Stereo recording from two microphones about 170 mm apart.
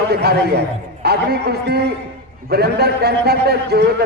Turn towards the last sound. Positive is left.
turn(degrees=-70)  # may be behind; listen again after turning